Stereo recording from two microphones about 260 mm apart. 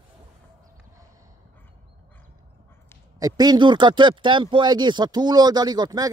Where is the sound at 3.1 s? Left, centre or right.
Centre.